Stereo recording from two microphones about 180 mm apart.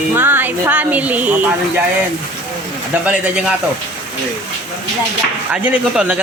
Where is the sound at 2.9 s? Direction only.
10° right (ahead or behind).